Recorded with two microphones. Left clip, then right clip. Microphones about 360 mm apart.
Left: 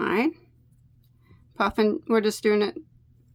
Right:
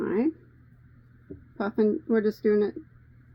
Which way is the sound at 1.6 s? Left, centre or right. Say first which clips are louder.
Left 2 dB; left.